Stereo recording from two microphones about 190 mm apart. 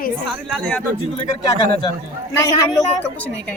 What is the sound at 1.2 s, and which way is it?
Speech, 25° left (ahead or behind).